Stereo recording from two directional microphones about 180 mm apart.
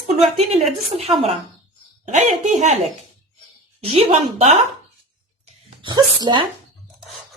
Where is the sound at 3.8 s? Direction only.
30° right (ahead or behind).